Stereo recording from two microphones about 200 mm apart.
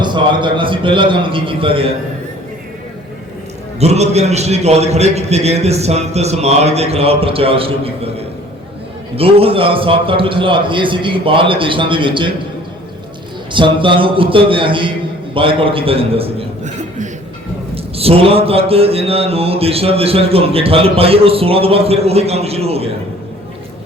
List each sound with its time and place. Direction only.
0.0 s mantra: 25° right (ahead or behind)
3.8 s a man's voice: 30° right (ahead or behind)
9.1 s mantra: 30° right (ahead or behind)
13.5 s mantra: 25° right (ahead or behind)
15.4 s a man's voice: 25° right (ahead or behind)
17.9 s mantra: 30° right (ahead or behind)